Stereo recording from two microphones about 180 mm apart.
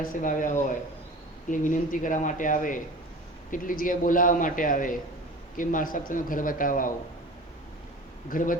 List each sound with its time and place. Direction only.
0.1 s a man's voice: 45° left (ahead or behind)
8.3 s a man's voice: 50° left (ahead or behind)